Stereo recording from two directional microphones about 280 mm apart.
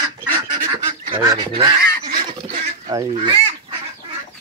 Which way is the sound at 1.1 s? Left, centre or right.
Centre.